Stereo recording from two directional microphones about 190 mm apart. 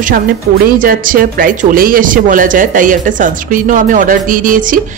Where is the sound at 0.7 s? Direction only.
45° right (ahead or behind).